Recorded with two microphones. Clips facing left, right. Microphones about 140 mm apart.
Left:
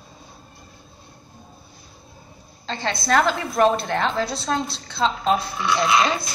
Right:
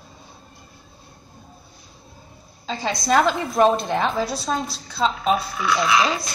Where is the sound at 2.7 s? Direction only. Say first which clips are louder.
Right 1 dB; 10° right (ahead or behind).